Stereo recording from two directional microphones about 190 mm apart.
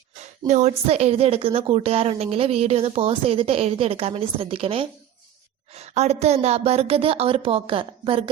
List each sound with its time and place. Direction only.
0.2 s speech: 35° right (ahead or behind)